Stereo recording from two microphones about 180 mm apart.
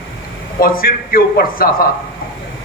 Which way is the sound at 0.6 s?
55° left (ahead or behind).